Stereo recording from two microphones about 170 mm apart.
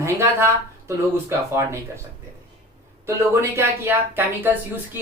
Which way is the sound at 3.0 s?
15° right (ahead or behind).